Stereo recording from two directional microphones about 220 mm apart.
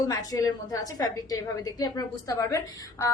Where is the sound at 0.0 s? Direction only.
15° left (ahead or behind).